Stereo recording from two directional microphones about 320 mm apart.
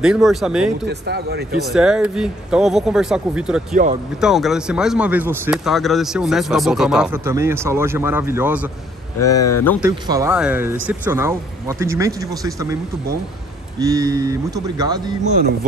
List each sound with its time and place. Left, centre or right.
0.0 s speech: centre
0.8 s a man's voice: right
1.7 s speech: centre
3.7 s speech: right
4.2 s speech: centre
9.6 s speech: centre
9.8 s speech: centre
13.7 s speech: centre